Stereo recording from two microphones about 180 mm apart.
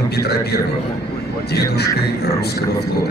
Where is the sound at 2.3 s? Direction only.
65° left (ahead or behind).